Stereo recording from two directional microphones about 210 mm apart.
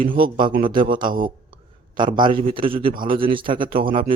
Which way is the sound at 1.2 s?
25° right (ahead or behind).